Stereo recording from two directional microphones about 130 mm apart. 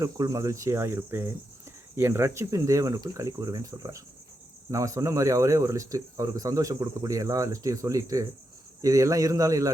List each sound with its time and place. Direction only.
0.0 s speech: 25° right (ahead or behind)